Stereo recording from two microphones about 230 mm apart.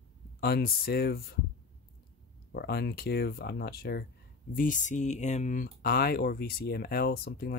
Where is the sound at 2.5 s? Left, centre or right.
Left.